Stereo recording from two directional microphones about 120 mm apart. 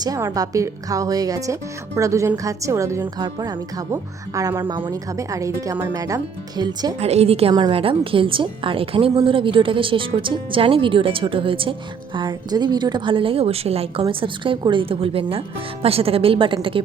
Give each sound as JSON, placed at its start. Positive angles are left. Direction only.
{"t": 0.0, "sound": "a woman's voice", "side_deg": -30}
{"t": 7.0, "sound": "a woman's voice", "side_deg": -60}
{"t": 14.1, "sound": "a woman's voice", "side_deg": -45}